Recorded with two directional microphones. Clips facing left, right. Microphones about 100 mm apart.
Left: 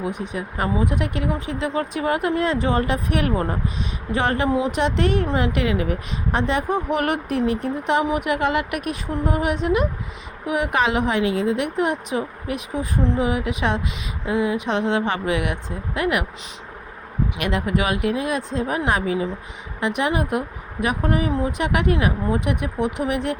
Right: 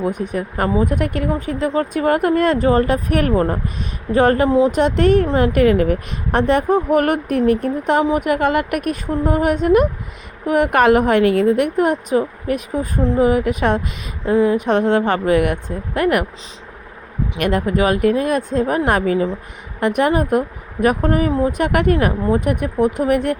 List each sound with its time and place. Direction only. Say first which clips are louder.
0.0 s speech: right 6 dB; 50° right (ahead or behind)
17.3 s speech: right 6 dB; 45° right (ahead or behind)